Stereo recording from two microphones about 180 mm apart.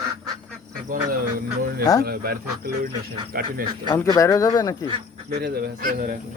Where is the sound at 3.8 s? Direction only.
20° left (ahead or behind).